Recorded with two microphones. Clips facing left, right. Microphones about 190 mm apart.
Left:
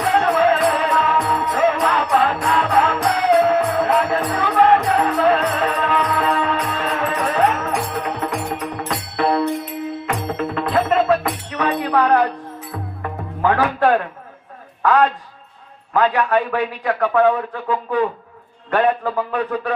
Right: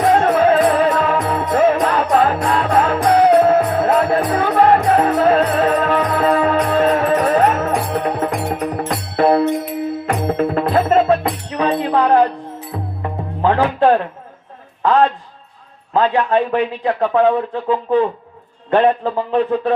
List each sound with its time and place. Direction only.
0.0 s music: 40° right (ahead or behind)
3.2 s music: 35° right (ahead or behind); by 13.6 s 15° right (ahead or behind)
13.6 s a man's voice: 25° right (ahead or behind)
15.9 s a man's voice: 25° right (ahead or behind)